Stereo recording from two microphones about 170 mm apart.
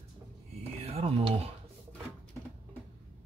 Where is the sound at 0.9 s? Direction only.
35° right (ahead or behind).